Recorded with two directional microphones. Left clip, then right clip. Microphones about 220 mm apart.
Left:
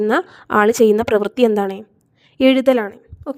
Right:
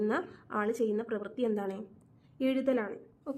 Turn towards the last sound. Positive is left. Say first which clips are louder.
# left 11 dB
turn(degrees=40)  # may be behind; listen again after turning